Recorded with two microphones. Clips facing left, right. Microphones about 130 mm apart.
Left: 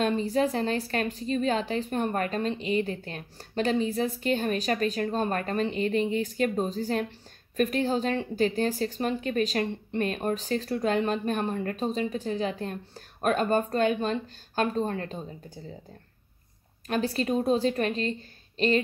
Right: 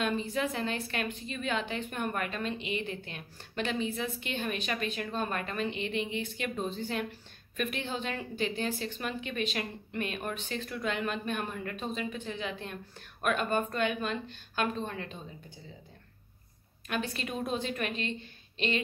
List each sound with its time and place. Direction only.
0.0 s a woman's voice: 40° left (ahead or behind)
16.8 s a woman's voice: 35° left (ahead or behind)